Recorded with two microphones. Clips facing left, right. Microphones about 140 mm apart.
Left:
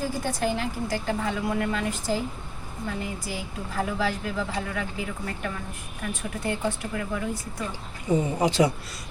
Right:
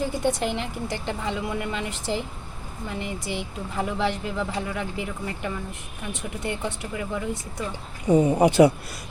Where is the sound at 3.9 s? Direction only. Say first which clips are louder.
Right 1 dB; 25° right (ahead or behind).